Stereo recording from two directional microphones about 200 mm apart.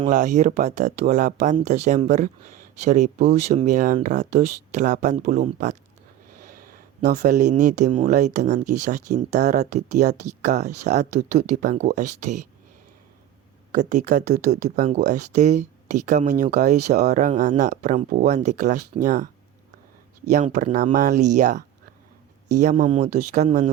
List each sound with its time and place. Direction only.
0.1 s speech: 40° right (ahead or behind)
13.7 s speech: 40° right (ahead or behind)
20.3 s speech: 40° right (ahead or behind)
22.6 s speech: 40° right (ahead or behind)